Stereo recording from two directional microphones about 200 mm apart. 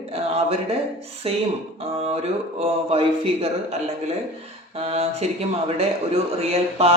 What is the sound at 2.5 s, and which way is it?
Speech, 30° right (ahead or behind).